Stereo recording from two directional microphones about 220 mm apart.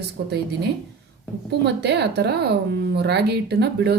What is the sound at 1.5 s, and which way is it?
Speech, 50° right (ahead or behind).